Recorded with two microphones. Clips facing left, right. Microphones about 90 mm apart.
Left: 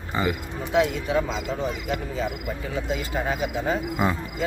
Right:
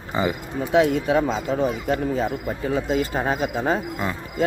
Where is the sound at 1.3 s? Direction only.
35° right (ahead or behind).